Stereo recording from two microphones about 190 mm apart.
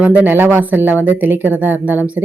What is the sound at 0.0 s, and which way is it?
Speech, 10° right (ahead or behind).